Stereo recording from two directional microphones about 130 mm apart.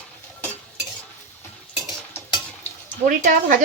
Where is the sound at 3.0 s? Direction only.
90° right.